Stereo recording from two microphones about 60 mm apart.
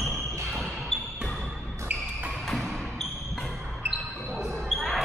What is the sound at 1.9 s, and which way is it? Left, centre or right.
Music, right.